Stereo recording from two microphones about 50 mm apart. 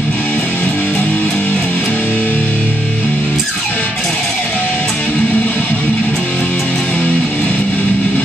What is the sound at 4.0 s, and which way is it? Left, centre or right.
Music, centre.